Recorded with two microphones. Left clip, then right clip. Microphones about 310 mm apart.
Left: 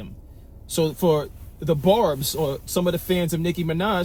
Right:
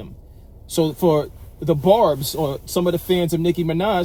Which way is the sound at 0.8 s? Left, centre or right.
Right.